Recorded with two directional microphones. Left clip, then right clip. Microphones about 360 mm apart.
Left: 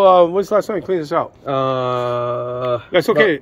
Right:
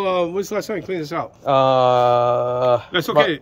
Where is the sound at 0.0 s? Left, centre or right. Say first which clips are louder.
Left 9 dB; centre.